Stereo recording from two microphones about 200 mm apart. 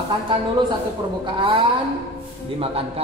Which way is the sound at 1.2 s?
25° right (ahead or behind).